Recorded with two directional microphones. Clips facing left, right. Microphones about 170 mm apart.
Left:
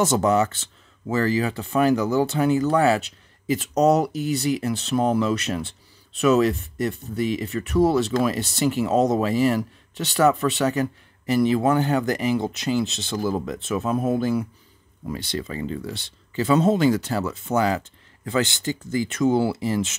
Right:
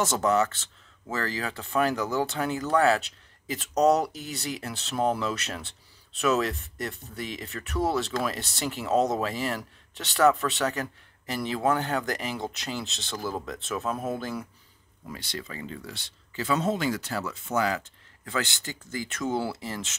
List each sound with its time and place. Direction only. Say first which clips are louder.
0.0 s speech: left 5 dB; 15° left (ahead or behind)
15.1 s speech: left 8 dB; 25° left (ahead or behind)